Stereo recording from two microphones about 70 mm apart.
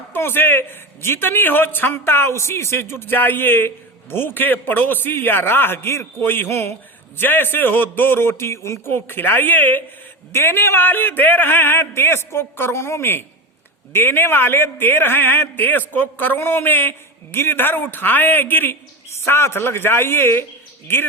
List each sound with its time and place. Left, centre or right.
0.1 s a man's voice: left